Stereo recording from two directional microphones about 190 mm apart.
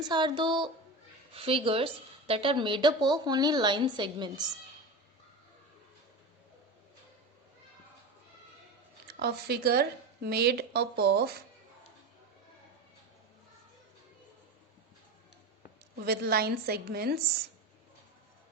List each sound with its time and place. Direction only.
0.1 s a woman's voice: 25° right (ahead or behind)
9.0 s a woman's voice: 55° right (ahead or behind)
16.0 s a woman's voice: 55° right (ahead or behind)